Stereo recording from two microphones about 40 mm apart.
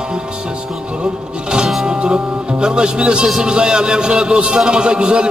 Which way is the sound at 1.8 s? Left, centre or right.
Right.